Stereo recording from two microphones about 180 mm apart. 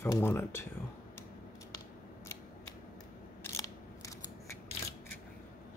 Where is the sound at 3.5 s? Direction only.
15° left (ahead or behind).